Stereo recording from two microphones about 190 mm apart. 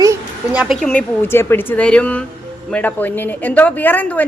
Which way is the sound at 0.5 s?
5° right (ahead or behind).